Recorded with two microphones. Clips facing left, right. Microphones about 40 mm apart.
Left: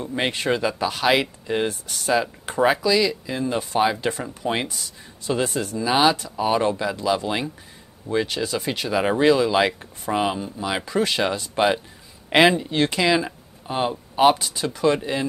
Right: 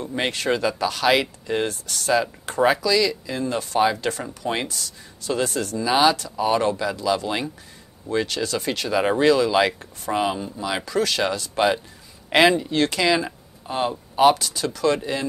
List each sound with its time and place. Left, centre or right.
0.0 s speech: centre